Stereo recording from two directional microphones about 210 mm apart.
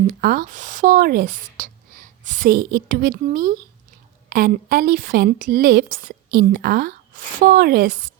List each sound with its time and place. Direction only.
0.1 s a woman's voice: 45° right (ahead or behind)